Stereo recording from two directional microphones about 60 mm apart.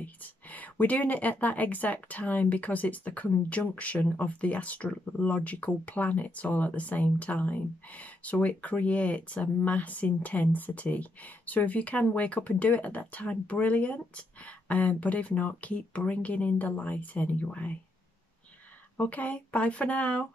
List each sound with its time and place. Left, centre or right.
0.0 s speech: left
18.9 s speech: left